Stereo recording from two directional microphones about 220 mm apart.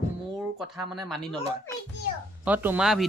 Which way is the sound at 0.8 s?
Centre (ahead or behind).